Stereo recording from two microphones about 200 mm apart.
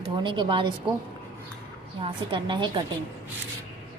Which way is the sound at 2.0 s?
25° right (ahead or behind).